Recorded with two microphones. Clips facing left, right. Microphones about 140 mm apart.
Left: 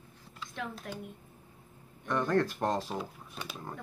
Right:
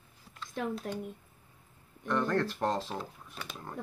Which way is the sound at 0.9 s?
40° right (ahead or behind).